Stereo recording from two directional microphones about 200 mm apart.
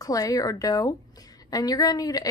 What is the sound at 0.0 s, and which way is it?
Speech, 20° left (ahead or behind).